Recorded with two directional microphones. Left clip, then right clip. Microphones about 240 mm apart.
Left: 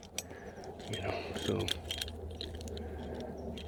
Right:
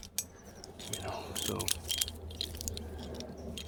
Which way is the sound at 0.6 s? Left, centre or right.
Centre.